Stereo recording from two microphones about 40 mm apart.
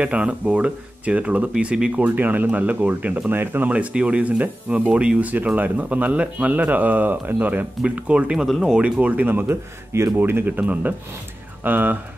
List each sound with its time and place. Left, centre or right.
0.0 s speech: right
1.5 s speech: right
2.0 s speech: right
3.3 s speech: right
3.7 s speech: right
5.6 s speech: right
8.1 s speech: right
8.5 s speech: centre
8.7 s speech: right
9.0 s speech: right
9.3 s speech: right
10.4 s speech: right